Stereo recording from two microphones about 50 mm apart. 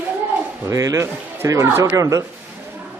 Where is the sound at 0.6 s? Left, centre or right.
Right.